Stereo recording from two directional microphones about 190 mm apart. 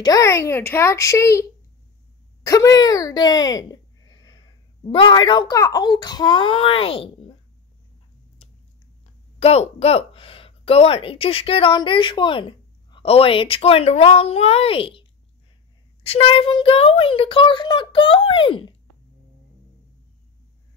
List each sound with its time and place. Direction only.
0.0 s a child's voice: 15° left (ahead or behind)
2.4 s speech: 15° left (ahead or behind)
9.4 s speech: 35° left (ahead or behind)